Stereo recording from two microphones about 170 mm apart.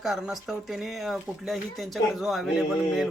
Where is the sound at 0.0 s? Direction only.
Centre (ahead or behind).